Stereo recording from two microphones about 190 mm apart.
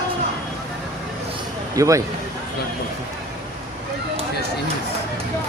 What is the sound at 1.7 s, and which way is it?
Speech, 15° right (ahead or behind).